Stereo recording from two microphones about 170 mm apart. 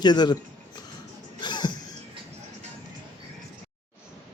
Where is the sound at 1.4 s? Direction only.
25° left (ahead or behind).